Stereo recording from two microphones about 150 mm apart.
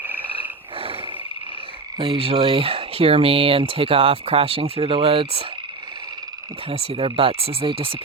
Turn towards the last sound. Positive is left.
turn(degrees=-35)  # may be behind; listen again after turning